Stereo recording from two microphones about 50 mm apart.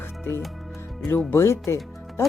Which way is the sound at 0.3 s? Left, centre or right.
Left.